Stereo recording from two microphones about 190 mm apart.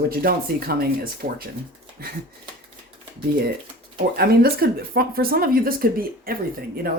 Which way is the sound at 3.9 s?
55° right (ahead or behind).